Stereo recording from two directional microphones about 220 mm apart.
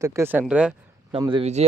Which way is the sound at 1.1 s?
20° right (ahead or behind).